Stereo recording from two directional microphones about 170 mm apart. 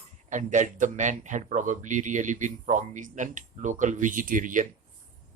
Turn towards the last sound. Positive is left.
turn(degrees=-50)  # may be behind; listen again after turning